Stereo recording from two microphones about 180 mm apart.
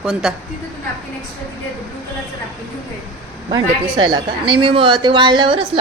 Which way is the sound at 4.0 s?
25° right (ahead or behind).